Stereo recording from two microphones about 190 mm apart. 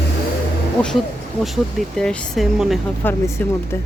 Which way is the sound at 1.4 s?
Centre (ahead or behind).